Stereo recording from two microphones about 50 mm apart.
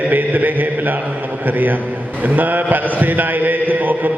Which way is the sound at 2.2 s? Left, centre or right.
Right.